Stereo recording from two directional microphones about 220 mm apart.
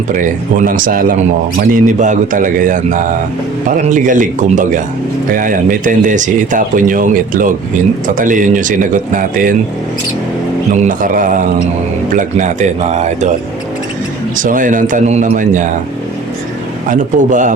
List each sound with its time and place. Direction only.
0.1 s speech: 35° right (ahead or behind)
10.8 s speech: 35° right (ahead or behind)
14.3 s speech: 40° right (ahead or behind)
16.9 s speech: 35° right (ahead or behind)